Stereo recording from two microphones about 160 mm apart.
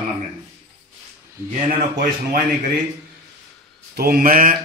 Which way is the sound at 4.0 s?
65° right (ahead or behind).